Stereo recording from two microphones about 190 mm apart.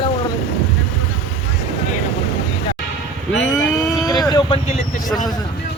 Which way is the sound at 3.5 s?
20° left (ahead or behind).